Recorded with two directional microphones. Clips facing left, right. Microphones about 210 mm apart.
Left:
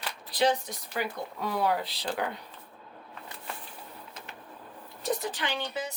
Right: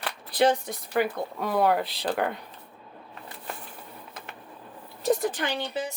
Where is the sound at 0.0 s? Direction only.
55° right (ahead or behind).